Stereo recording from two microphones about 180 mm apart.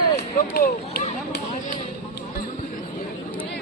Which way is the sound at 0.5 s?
55° left (ahead or behind).